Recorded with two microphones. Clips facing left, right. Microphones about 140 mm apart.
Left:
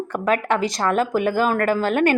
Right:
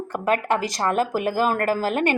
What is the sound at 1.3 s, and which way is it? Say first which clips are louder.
Speech: even; 35° right (ahead or behind).